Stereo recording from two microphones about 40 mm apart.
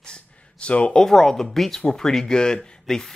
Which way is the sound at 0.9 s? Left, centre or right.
Centre.